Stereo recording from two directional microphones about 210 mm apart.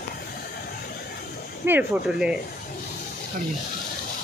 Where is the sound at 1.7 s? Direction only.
5° right (ahead or behind).